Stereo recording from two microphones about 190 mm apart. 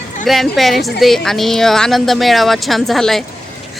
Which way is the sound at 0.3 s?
Centre (ahead or behind).